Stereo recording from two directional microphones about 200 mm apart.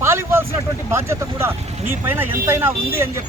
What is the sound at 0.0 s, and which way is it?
Vehicle, 10° right (ahead or behind).